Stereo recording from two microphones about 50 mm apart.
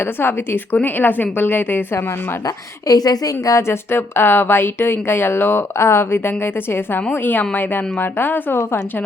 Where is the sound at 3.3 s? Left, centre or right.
Left.